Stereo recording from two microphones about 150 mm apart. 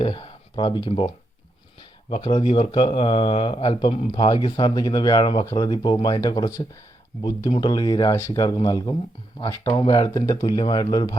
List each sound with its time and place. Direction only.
0.0 s speech: 35° left (ahead or behind)